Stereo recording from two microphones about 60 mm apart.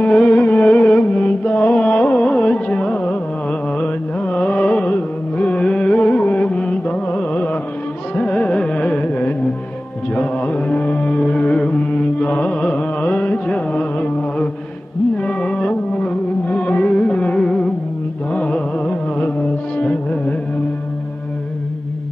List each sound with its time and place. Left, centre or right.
0.0 s music: left
5.6 s carnatic music: centre
10.1 s mantra: centre
12.2 s carnatic music: left
15.1 s music: centre
18.3 s carnatic music: centre
19.8 s music: left